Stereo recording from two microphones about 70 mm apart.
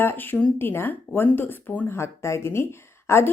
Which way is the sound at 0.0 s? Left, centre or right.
Left.